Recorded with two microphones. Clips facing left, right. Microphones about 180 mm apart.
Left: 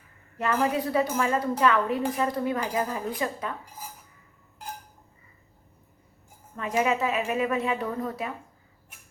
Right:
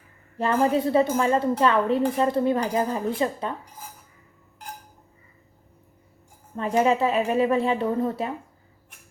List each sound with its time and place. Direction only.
0.3 s a woman's voice: 30° right (ahead or behind)
6.6 s a woman's voice: 30° right (ahead or behind)